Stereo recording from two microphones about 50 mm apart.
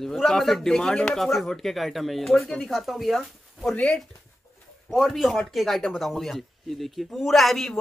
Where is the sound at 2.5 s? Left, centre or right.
Centre.